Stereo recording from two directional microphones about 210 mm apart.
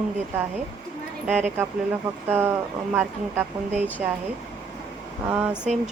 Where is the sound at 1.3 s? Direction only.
5° right (ahead or behind).